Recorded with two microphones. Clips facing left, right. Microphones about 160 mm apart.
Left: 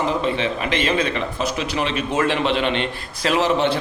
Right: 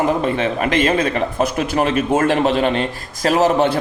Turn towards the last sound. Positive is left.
turn(degrees=-45)  # may be behind; listen again after turning